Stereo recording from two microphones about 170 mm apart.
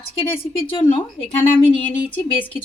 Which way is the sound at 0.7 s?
30° left (ahead or behind).